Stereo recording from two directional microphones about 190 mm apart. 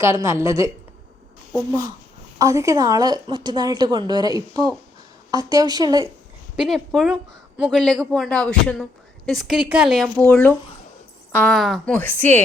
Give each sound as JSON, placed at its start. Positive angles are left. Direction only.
{"t": 0.0, "sound": "a woman's voice", "side_deg": -15}
{"t": 2.4, "sound": "a woman's voice", "side_deg": -15}
{"t": 6.7, "sound": "a man's voice", "side_deg": 0}